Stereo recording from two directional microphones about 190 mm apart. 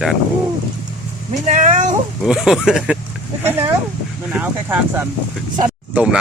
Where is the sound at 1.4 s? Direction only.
40° right (ahead or behind).